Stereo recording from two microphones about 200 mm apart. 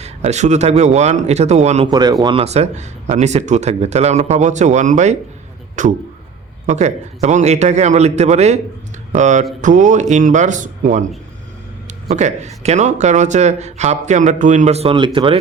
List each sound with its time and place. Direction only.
0.0 s speech: 35° right (ahead or behind)
1.9 s speech: 20° right (ahead or behind); by 11.0 s 40° right (ahead or behind)
12.0 s speech: 35° right (ahead or behind)